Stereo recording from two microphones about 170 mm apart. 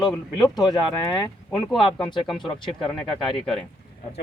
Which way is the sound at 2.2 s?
Centre (ahead or behind).